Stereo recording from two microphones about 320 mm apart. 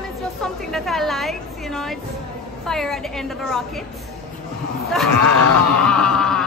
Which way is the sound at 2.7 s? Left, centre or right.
Centre.